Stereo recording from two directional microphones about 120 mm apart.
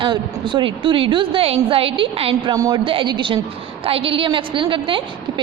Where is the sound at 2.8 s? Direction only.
45° right (ahead or behind).